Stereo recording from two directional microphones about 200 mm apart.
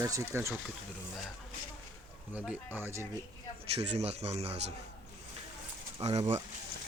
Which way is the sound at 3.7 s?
30° right (ahead or behind).